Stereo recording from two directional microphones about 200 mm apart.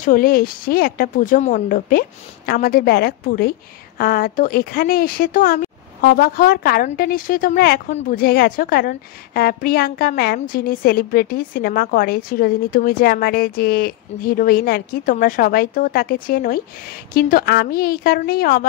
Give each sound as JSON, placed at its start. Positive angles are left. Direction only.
{"t": 0.0, "sound": "speech", "side_deg": 45}